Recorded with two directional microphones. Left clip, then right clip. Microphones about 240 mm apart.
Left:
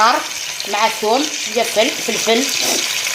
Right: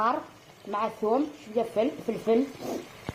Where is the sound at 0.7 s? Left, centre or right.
Left.